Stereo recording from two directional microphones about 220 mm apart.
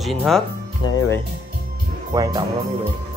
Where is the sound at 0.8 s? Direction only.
15° left (ahead or behind).